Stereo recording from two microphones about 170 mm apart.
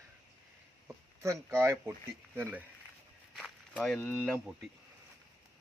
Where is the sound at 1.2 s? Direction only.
15° right (ahead or behind).